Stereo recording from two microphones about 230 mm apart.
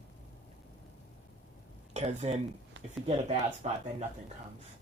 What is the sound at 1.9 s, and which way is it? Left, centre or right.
Speech, right.